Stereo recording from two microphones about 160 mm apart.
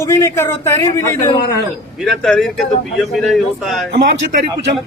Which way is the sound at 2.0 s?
Centre (ahead or behind).